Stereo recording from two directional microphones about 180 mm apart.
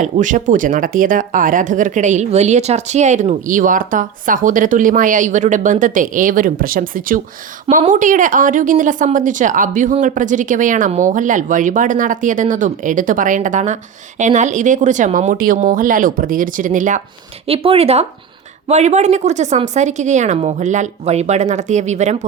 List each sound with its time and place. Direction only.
0.0 s a woman's voice: 45° right (ahead or behind)
17.4 s a woman's voice: 30° right (ahead or behind)